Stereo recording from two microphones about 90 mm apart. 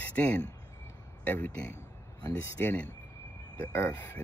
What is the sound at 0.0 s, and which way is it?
Speech, 15° left (ahead or behind).